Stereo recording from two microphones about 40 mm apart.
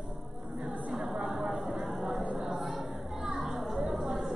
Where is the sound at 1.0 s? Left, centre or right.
Right; by 4.3 s centre.